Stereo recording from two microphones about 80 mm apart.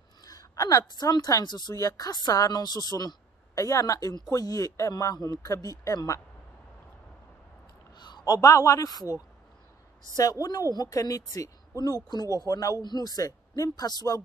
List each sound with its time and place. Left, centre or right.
0.2 s a woman's voice: left
7.9 s a man's voice: left
10.4 s a woman's voice: left
12.4 s a woman's voice: left
12.8 s a woman's voice: left